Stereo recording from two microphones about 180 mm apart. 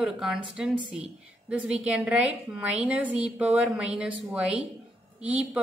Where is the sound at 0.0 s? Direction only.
5° right (ahead or behind).